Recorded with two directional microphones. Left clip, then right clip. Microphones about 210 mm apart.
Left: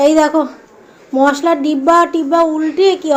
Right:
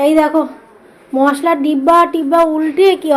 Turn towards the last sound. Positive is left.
turn(degrees=-10)  # may be behind; listen again after turning